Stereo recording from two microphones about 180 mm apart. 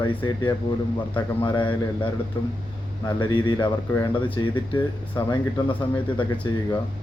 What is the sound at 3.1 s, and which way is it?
Speech, 25° left (ahead or behind).